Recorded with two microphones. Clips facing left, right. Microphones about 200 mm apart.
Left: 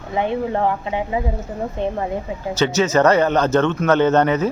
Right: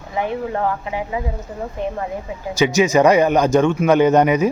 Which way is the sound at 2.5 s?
10° right (ahead or behind).